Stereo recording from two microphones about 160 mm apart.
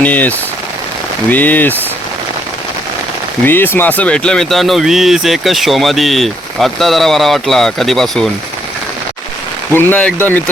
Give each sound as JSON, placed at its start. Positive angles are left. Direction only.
{"t": 0.0, "sound": "speech", "side_deg": 10}
{"t": 3.4, "sound": "speech", "side_deg": 15}
{"t": 9.7, "sound": "speech", "side_deg": 10}